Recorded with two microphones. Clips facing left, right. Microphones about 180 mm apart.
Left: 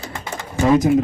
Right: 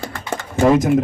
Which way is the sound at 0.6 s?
55° right (ahead or behind).